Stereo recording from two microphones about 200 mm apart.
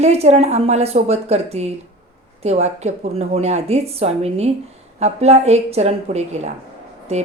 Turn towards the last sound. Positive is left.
turn(degrees=-35)  # may be behind; listen again after turning